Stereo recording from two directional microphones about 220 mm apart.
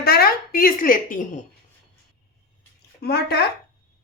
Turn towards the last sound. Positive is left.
turn(degrees=45)  # may be behind; listen again after turning